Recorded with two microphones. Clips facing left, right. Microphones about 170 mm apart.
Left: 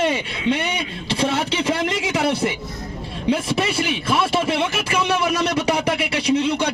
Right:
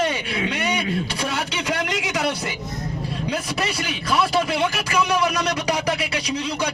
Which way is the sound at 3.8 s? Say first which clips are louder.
Left 2 dB; 25° left (ahead or behind).